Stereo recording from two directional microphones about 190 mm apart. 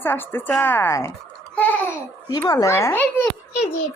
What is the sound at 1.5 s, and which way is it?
Babbling, 10° left (ahead or behind).